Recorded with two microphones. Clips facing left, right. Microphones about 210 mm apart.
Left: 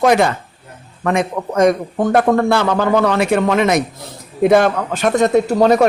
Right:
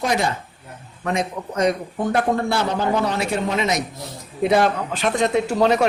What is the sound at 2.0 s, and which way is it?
A man's voice, 65° left (ahead or behind).